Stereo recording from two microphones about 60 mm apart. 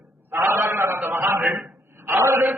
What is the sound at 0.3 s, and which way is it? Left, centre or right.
A man's voice, right.